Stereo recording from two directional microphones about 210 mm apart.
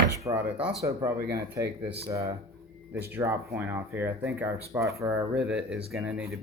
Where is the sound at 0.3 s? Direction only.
15° right (ahead or behind).